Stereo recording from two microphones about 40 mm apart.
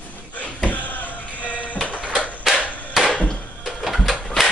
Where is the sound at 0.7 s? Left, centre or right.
Left.